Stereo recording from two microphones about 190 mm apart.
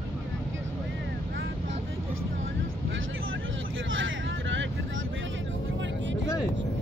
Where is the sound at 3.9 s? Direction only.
85° right.